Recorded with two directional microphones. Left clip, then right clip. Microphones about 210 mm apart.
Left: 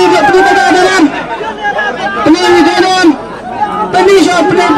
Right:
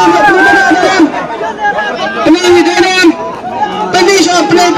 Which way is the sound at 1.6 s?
15° right (ahead or behind).